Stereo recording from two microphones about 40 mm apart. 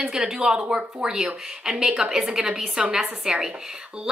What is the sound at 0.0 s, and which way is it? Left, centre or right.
A woman's voice, centre.